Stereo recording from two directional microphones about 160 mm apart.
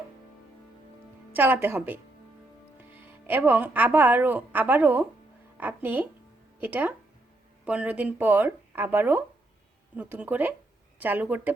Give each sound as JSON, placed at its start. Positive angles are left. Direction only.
{"t": 1.3, "sound": "speech", "side_deg": -10}